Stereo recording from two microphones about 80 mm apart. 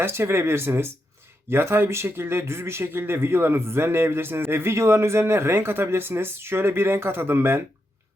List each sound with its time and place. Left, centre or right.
0.0 s speech: right